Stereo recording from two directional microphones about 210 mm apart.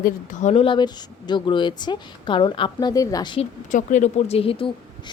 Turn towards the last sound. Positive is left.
turn(degrees=25)  # may be behind; listen again after turning